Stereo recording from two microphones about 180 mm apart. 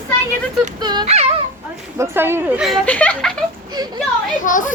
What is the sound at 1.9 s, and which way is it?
Speech, 15° right (ahead or behind).